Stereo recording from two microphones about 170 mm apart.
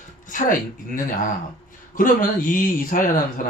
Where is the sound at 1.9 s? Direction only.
50° left (ahead or behind).